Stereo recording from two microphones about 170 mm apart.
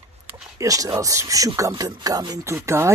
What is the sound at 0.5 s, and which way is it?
Speech, 20° right (ahead or behind).